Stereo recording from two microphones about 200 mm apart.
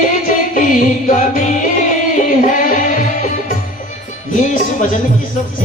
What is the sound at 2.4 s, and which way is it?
Music, 40° left (ahead or behind).